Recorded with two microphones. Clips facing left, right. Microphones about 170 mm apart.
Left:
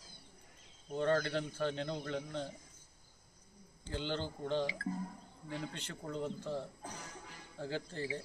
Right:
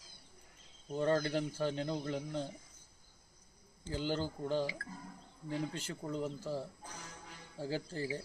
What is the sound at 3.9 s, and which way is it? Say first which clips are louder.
Speech: right 2 dB; 5° right (ahead or behind).